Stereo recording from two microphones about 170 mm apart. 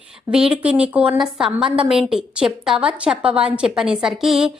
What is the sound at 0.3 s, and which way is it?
A woman's voice, 5° right (ahead or behind).